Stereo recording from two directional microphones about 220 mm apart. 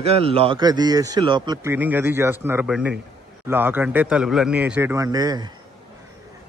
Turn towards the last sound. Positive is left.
turn(degrees=-20)  # may be behind; listen again after turning